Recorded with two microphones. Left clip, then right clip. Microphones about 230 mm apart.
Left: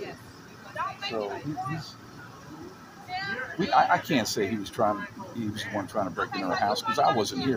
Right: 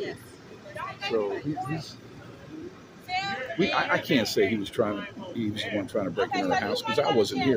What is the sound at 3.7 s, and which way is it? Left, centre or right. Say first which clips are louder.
Speech: left 5 dB; centre.